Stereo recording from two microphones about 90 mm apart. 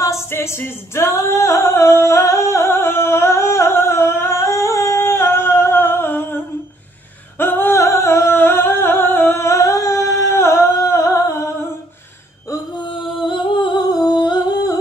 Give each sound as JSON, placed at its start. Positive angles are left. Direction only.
{"t": 0.0, "sound": "singing", "side_deg": 35}
{"t": 7.3, "sound": "humming", "side_deg": 25}
{"t": 11.0, "sound": "a sound", "side_deg": 35}
{"t": 12.7, "sound": "humming", "side_deg": 65}